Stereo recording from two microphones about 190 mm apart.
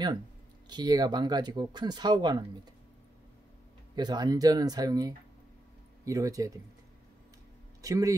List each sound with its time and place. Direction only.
0.7 s speech: 20° right (ahead or behind)
3.9 s speech: 20° right (ahead or behind)
7.8 s speech: 20° right (ahead or behind)